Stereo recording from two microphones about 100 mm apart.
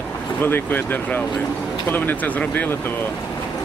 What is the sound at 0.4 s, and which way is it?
Speech, 20° left (ahead or behind).